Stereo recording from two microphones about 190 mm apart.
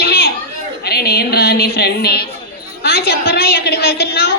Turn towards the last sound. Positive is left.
turn(degrees=55)  # may be behind; listen again after turning